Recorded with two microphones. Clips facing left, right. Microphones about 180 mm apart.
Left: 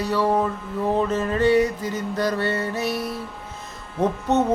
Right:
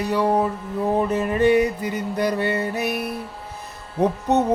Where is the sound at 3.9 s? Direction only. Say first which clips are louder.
Right 1 dB; 15° right (ahead or behind).